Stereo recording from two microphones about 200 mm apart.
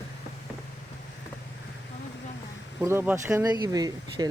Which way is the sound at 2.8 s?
10° right (ahead or behind).